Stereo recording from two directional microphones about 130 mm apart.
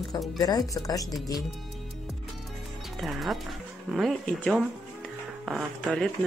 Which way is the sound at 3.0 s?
Centre (ahead or behind).